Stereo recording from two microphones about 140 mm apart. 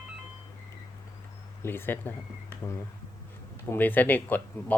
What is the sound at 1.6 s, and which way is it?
Speech, 15° left (ahead or behind).